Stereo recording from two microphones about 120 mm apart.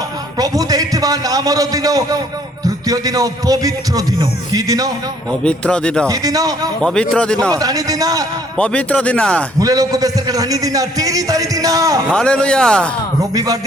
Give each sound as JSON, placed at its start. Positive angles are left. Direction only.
{"t": 0.3, "sound": "a sound", "side_deg": -30}
{"t": 2.6, "sound": "a man's voice", "side_deg": -30}
{"t": 5.3, "sound": "speech", "side_deg": 10}
{"t": 6.1, "sound": "a man's voice", "side_deg": -30}
{"t": 6.8, "sound": "speech", "side_deg": 5}
{"t": 7.5, "sound": "a man's voice", "side_deg": -30}
{"t": 8.5, "sound": "speech", "side_deg": 10}
{"t": 9.6, "sound": "a man's voice", "side_deg": -30}
{"t": 12.0, "sound": "speech", "side_deg": 5}
{"t": 13.3, "sound": "a man's voice", "side_deg": -30}